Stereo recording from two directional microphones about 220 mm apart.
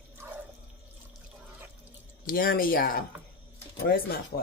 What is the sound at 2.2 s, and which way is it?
Speech, 40° left (ahead or behind).